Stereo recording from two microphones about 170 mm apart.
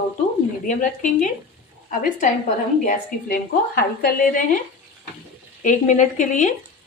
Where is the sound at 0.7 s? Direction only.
50° left (ahead or behind).